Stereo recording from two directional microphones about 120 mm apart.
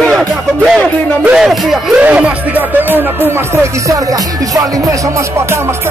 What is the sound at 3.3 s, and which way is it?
Speech, 25° right (ahead or behind).